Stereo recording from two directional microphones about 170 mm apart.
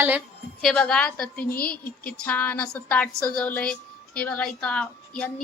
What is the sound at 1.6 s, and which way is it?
Speech, 60° left (ahead or behind).